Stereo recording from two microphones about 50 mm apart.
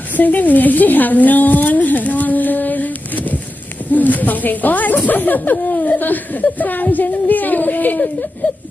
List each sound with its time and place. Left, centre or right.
0.2 s speech: left